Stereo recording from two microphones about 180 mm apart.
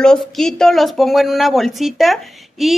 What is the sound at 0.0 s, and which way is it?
A woman's voice, 5° left (ahead or behind).